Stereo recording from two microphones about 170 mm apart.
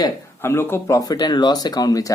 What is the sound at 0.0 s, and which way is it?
Speech, 15° left (ahead or behind).